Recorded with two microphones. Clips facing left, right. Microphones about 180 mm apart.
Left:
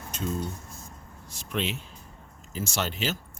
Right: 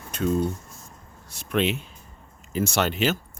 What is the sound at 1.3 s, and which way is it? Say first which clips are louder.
Speech: right 7 dB; 60° right (ahead or behind).